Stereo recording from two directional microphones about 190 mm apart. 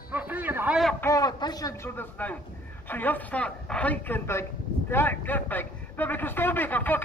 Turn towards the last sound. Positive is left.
turn(degrees=10)  # may be behind; listen again after turning